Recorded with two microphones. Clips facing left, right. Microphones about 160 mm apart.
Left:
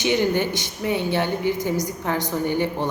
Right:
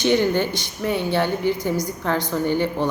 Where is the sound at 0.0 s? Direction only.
15° left (ahead or behind).